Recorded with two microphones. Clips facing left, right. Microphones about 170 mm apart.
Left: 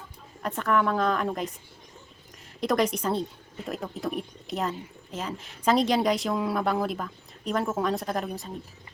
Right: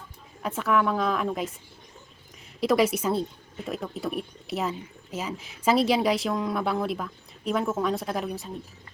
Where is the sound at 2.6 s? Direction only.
5° right (ahead or behind).